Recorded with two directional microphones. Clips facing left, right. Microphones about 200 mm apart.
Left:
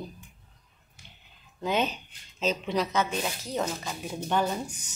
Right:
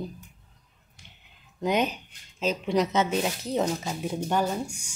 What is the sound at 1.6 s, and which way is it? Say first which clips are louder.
Speech: right 2 dB; 15° right (ahead or behind).